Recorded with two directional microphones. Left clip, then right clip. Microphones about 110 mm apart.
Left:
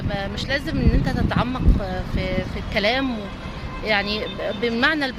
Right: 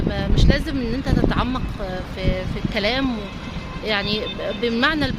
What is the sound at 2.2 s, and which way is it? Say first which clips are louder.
Speech: right 2 dB; 15° right (ahead or behind).